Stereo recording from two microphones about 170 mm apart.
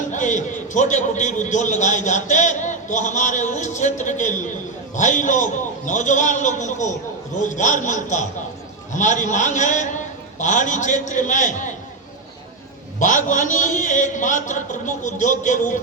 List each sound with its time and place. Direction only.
0.1 s a man's voice: 45° left (ahead or behind)
13.0 s a man's voice: 45° left (ahead or behind)